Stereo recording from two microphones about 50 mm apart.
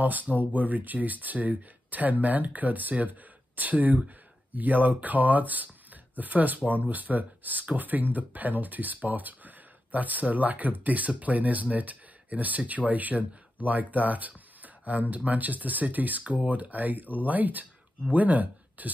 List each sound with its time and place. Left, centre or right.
0.0 s speech: right